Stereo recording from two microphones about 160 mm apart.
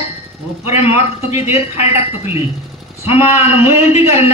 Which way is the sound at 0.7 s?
40° left (ahead or behind).